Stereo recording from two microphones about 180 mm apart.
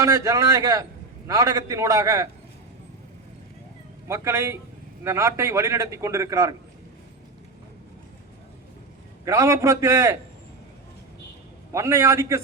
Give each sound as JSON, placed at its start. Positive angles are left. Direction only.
{"t": 0.0, "sound": "a man's voice", "side_deg": -15}
{"t": 4.1, "sound": "a man's voice", "side_deg": -15}
{"t": 9.2, "sound": "a man's voice", "side_deg": -15}
{"t": 11.7, "sound": "a man's voice", "side_deg": -15}